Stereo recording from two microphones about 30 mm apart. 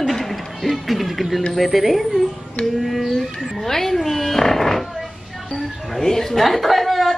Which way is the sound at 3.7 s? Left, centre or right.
Centre.